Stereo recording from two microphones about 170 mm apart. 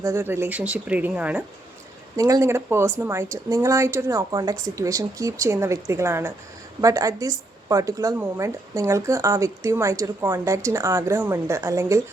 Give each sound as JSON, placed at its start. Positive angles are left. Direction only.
{"t": 0.0, "sound": "speech", "side_deg": -15}
{"t": 2.1, "sound": "a woman's voice", "side_deg": -20}